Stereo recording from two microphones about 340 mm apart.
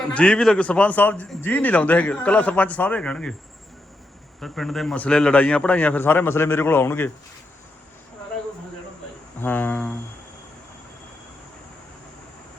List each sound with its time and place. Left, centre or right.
0.1 s a man's voice: centre
4.4 s a man's voice: centre
9.4 s a man's voice: centre